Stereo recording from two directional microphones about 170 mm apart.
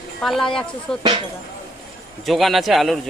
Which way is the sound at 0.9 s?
30° left (ahead or behind).